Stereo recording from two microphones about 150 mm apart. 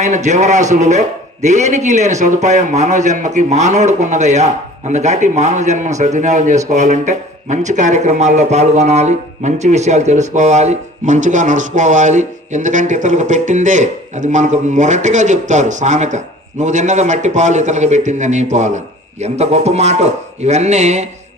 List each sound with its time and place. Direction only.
0.0 s a man's voice: 50° right (ahead or behind)